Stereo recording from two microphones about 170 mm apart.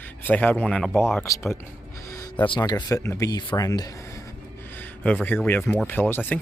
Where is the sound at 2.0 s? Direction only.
20° left (ahead or behind).